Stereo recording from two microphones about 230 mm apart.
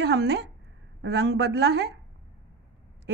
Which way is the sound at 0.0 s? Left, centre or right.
Right.